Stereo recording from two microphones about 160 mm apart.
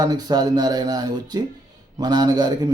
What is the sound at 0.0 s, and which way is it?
A man's voice, 25° right (ahead or behind).